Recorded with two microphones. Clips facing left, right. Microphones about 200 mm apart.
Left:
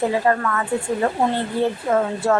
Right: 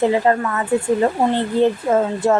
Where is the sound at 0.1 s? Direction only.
20° right (ahead or behind).